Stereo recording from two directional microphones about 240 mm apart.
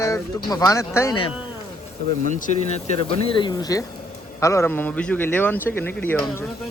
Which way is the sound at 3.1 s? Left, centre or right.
Left.